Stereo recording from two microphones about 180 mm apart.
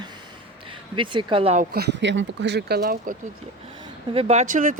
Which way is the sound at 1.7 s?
70° right (ahead or behind).